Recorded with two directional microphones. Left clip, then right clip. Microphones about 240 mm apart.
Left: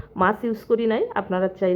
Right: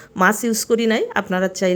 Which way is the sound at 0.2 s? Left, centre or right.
Right.